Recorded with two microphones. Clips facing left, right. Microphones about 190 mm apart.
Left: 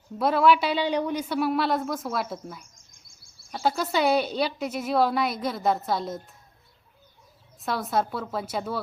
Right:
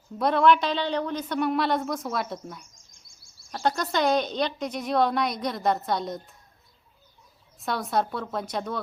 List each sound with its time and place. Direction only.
0.2 s a woman's voice: 5° left (ahead or behind)
7.6 s a woman's voice: centre (ahead or behind)